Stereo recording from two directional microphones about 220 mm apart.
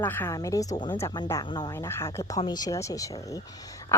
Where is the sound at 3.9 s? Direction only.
10° left (ahead or behind).